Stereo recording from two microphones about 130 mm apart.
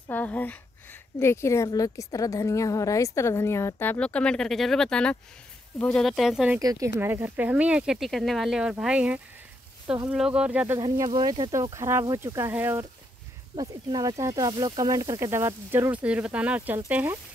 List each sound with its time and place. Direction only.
0.1 s a woman's voice: 15° left (ahead or behind); by 6.6 s 5° right (ahead or behind)
6.6 s speech: 25° right (ahead or behind); by 10.8 s 10° right (ahead or behind)
11.1 s speech: 35° right (ahead or behind)
11.7 s speech: 20° right (ahead or behind)